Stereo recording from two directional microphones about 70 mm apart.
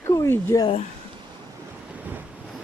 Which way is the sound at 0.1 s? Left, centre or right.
Left.